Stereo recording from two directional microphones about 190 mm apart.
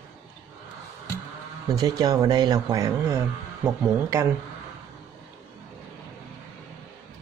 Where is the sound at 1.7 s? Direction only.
20° right (ahead or behind).